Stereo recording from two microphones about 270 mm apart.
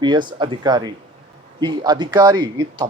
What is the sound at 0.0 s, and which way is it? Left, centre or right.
Speech, centre.